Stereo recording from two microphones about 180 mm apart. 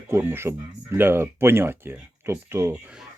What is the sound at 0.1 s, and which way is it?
Speech, 15° right (ahead or behind).